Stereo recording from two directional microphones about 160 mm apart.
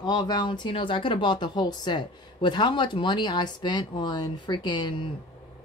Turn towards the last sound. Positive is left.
turn(degrees=30)  # may be behind; listen again after turning